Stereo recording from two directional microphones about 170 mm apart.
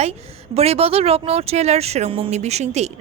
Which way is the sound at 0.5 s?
35° right (ahead or behind).